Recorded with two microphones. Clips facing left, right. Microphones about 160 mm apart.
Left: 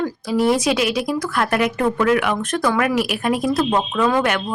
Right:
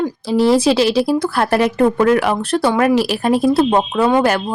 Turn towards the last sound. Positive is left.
turn(degrees=-30)  # may be behind; listen again after turning